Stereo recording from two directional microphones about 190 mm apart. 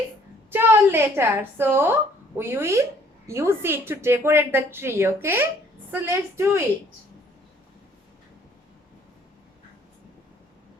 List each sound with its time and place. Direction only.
0.5 s a woman's voice: 10° right (ahead or behind)